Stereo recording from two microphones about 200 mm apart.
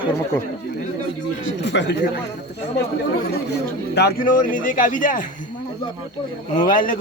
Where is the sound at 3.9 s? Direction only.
55° left (ahead or behind).